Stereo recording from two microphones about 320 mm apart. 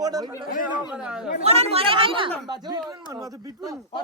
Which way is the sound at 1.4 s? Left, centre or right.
Centre.